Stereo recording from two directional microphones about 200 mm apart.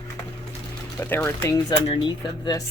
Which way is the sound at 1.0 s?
10° left (ahead or behind).